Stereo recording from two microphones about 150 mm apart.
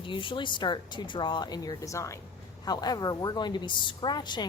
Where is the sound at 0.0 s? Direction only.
35° left (ahead or behind).